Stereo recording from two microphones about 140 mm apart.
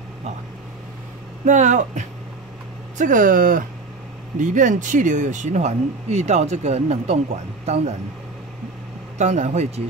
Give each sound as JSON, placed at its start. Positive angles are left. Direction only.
{"t": 1.4, "sound": "speech", "side_deg": -60}
{"t": 3.0, "sound": "speech", "side_deg": -70}
{"t": 4.4, "sound": "a man's voice", "side_deg": -65}
{"t": 9.2, "sound": "speech", "side_deg": -55}